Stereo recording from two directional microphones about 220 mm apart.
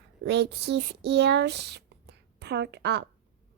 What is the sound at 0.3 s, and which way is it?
A woman's voice, 50° right (ahead or behind).